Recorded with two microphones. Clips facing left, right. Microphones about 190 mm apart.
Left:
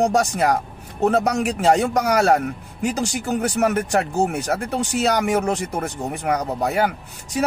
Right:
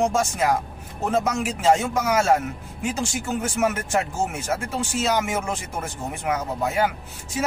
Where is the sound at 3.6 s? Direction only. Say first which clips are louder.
Left 2 dB; 65° left (ahead or behind).